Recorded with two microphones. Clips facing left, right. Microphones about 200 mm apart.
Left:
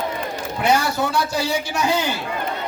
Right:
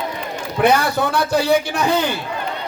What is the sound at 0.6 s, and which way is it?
A man's voice, 60° right (ahead or behind).